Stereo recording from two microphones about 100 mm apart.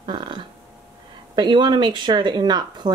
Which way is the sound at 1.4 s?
50° right (ahead or behind).